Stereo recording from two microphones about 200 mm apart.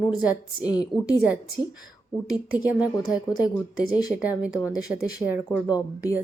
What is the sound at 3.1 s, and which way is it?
A woman's voice, 20° left (ahead or behind).